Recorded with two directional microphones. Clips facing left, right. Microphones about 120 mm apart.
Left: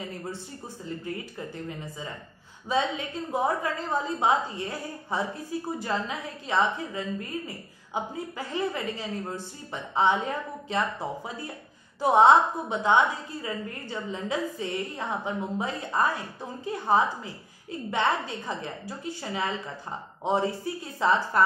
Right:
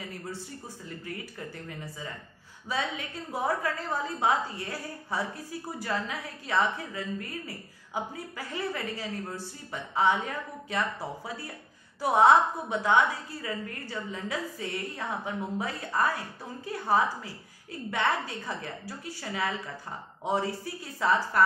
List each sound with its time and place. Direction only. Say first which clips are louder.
0.8 s a woman's voice: left 6 dB; 25° left (ahead or behind)
2.7 s a woman's voice: left 5 dB; 25° left (ahead or behind)